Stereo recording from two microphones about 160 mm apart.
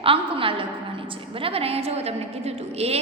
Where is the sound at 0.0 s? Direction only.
35° right (ahead or behind).